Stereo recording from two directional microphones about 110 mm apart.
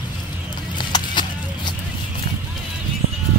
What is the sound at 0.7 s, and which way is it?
Clip-clop, 45° left (ahead or behind).